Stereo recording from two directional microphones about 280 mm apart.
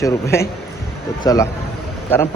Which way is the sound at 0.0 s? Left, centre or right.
Centre.